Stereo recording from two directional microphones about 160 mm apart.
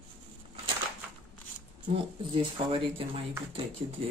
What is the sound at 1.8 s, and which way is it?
Speech, 35° right (ahead or behind).